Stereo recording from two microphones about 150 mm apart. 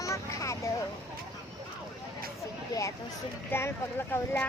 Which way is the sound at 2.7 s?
20° left (ahead or behind).